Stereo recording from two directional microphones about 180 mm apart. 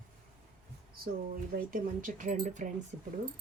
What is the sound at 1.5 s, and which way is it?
Speech, 50° right (ahead or behind).